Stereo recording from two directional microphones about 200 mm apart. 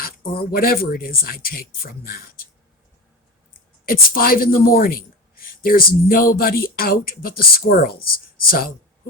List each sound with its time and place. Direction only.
0.0 s speech: 45° left (ahead or behind)
3.5 s speech: 45° left (ahead or behind)